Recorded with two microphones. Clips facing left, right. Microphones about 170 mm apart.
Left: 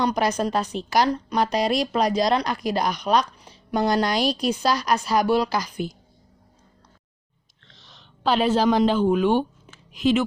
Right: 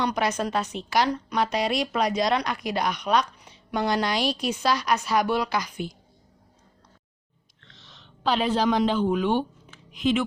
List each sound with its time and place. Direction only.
0.0 s a woman's voice: 35° left (ahead or behind)
7.7 s speech: 35° left (ahead or behind)